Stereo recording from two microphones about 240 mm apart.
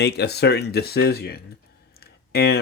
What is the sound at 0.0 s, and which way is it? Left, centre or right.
Speech, left.